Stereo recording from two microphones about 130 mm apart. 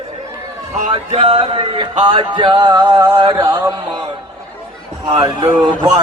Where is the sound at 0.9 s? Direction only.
45° right (ahead or behind); by 4.0 s 30° right (ahead or behind).